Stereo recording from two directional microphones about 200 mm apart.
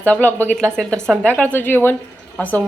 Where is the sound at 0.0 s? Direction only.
10° left (ahead or behind).